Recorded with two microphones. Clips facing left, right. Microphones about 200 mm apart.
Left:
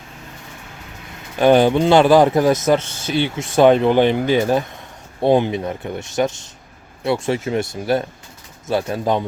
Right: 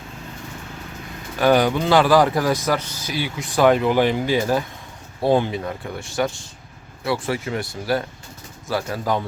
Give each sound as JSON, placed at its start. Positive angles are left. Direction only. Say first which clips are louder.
{"t": 1.4, "sound": "speech", "louder": "left 4 dB", "side_deg": 25}